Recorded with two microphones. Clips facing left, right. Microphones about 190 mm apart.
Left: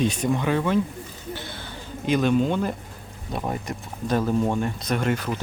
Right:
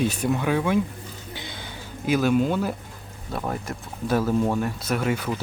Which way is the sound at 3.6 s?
5° right (ahead or behind).